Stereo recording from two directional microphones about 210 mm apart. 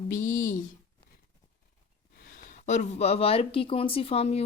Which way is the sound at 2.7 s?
35° left (ahead or behind).